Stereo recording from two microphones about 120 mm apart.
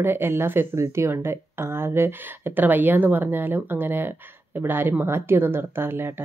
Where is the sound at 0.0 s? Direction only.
20° right (ahead or behind).